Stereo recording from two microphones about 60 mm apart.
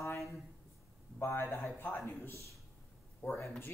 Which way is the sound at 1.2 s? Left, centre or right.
Left.